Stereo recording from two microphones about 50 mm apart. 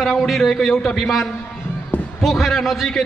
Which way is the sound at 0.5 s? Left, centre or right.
Centre.